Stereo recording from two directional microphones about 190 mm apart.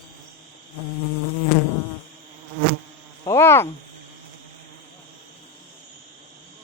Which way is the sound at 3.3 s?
15° left (ahead or behind).